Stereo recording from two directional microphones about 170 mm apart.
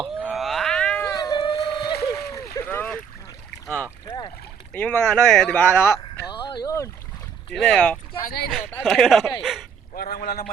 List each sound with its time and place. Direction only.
0.0 s cat: 5° right (ahead or behind)
1.0 s boat: 20° left (ahead or behind)
2.6 s boat: 10° left (ahead or behind)
3.7 s speech: 5° left (ahead or behind)
7.5 s speech: 5° left (ahead or behind)
8.3 s speech: 70° left (ahead or behind)
8.5 s speech: centre (ahead or behind)
9.9 s speech: 60° left (ahead or behind)